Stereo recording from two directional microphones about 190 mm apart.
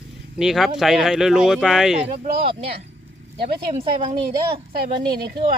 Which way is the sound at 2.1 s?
50° right (ahead or behind).